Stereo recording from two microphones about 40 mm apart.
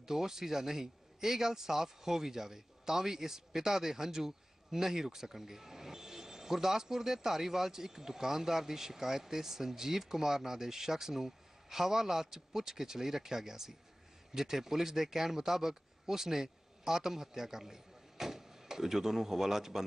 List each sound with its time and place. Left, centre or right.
0.0 s a man's voice: centre